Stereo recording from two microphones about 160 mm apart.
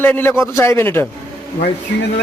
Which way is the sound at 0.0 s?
15° left (ahead or behind).